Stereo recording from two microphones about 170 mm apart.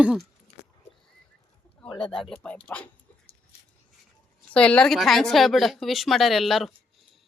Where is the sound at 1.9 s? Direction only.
30° left (ahead or behind).